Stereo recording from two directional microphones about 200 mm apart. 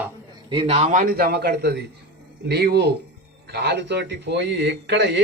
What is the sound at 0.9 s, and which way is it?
A man's voice, 45° right (ahead or behind).